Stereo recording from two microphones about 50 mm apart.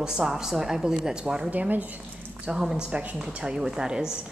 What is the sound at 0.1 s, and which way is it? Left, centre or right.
A woman's voice, centre.